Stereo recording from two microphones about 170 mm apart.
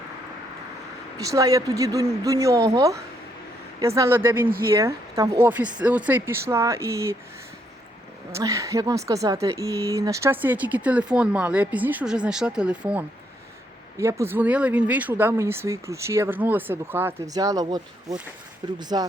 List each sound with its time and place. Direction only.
1.2 s speech: 20° right (ahead or behind)
8.3 s speech: 15° right (ahead or behind)